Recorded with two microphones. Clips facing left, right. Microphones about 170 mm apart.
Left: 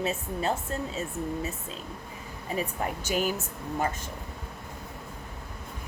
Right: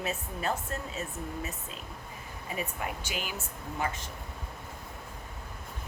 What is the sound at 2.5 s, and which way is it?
Speech, 40° left (ahead or behind).